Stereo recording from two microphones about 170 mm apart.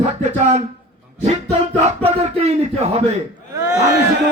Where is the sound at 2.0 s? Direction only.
35° right (ahead or behind).